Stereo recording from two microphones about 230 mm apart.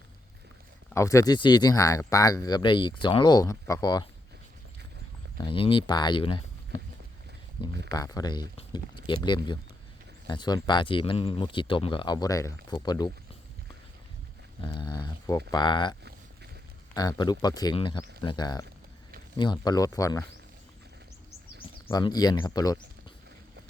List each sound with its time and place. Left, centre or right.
0.9 s speech: centre
5.4 s speech: left
7.9 s speech: centre
14.6 s speech: left
21.8 s speech: centre